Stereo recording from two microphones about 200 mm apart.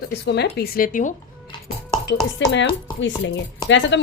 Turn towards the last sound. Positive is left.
turn(degrees=65)  # may be behind; listen again after turning